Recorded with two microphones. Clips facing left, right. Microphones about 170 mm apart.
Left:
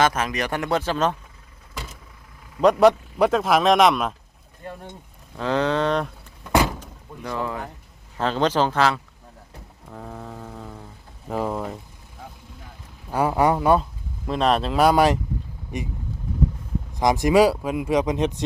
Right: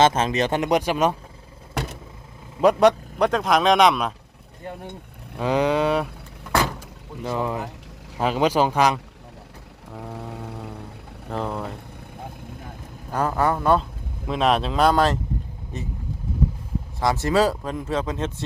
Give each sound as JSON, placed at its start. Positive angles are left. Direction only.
{"t": 0.0, "sound": "speech", "side_deg": -25}
{"t": 1.7, "sound": "vehicle", "side_deg": -65}
{"t": 2.6, "sound": "speech", "side_deg": 0}
{"t": 5.4, "sound": "speech", "side_deg": -10}
{"t": 6.5, "sound": "vehicle", "side_deg": 15}
{"t": 7.3, "sound": "speech", "side_deg": -20}
{"t": 9.9, "sound": "a sound", "side_deg": -10}
{"t": 10.5, "sound": "music", "side_deg": -10}
{"t": 11.3, "sound": "speech", "side_deg": 5}
{"t": 13.1, "sound": "speech", "side_deg": 10}
{"t": 14.3, "sound": "speech", "side_deg": 0}
{"t": 17.0, "sound": "speech", "side_deg": 15}